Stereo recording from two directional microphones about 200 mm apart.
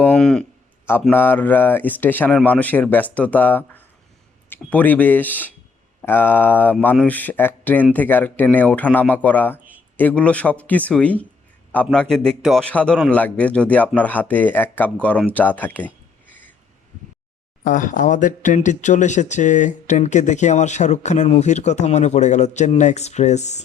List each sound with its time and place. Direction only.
0.0 s a man's voice: 5° left (ahead or behind)
17.6 s speech: 40° left (ahead or behind)